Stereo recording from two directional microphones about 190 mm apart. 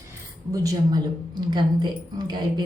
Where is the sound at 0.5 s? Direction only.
20° right (ahead or behind).